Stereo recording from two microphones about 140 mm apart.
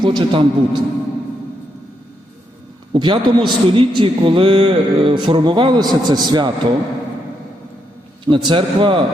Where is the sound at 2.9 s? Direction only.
35° right (ahead or behind).